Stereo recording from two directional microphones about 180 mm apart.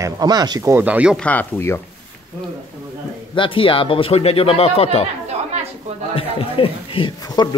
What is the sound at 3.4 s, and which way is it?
Speech, 30° left (ahead or behind).